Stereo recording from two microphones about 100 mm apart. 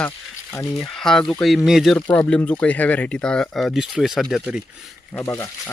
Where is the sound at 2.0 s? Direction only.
20° left (ahead or behind); by 4.9 s 5° right (ahead or behind).